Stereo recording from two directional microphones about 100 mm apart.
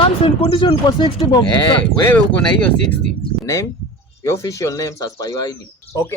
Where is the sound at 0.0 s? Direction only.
65° left (ahead or behind).